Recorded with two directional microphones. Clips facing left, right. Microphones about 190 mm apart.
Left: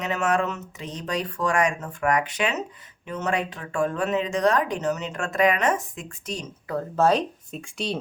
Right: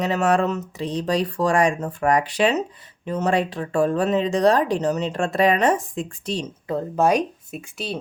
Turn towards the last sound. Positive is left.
turn(degrees=-5)  # may be behind; listen again after turning